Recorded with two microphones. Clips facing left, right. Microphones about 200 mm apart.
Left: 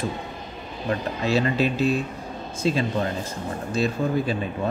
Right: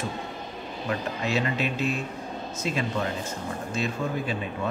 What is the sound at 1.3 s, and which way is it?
Speech, 35° left (ahead or behind).